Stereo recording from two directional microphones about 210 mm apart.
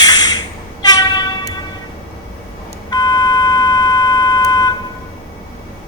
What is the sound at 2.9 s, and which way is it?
Beep, 15° left (ahead or behind).